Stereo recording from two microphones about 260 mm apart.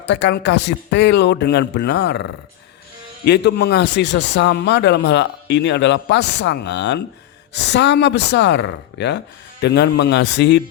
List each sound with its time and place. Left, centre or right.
0.0 s a man's voice: left
3.2 s a man's voice: left